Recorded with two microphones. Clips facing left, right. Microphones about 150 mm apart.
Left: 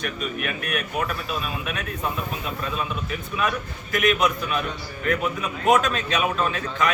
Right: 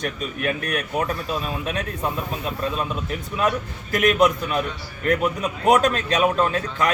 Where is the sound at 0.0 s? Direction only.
35° right (ahead or behind).